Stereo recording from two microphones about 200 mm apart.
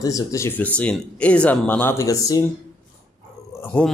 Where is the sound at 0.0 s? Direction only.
15° left (ahead or behind).